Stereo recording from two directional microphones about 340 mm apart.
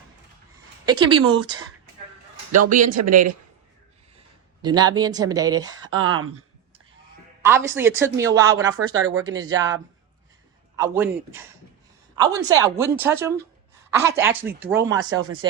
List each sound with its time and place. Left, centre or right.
0.9 s speech: centre
2.6 s speech: right
4.6 s speech: centre
5.9 s speech: right
7.4 s speech: centre
9.0 s speech: right
9.3 s speech: centre
10.8 s a man's voice: centre
15.1 s speech: right